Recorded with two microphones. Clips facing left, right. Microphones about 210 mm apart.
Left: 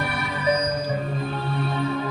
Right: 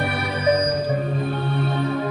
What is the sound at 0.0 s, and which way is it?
Music, 40° right (ahead or behind).